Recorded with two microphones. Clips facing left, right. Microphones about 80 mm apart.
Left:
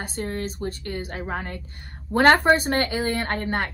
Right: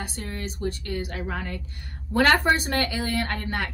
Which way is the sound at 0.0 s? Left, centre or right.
Left.